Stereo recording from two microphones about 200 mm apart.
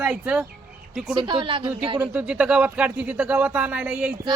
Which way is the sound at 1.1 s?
25° right (ahead or behind).